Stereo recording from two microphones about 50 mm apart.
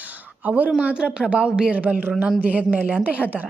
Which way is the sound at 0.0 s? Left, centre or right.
Right.